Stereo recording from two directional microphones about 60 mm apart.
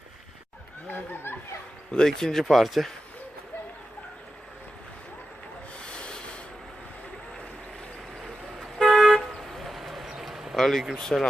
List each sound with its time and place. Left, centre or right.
0.9 s a sound: left
1.9 s speech: centre
5.8 s rub: centre
8.2 s vehicle: centre
11.1 s speech: centre